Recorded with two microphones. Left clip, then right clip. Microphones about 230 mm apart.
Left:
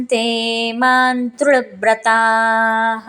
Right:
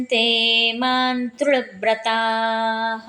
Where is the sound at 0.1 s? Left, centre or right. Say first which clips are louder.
Right 1 dB; left.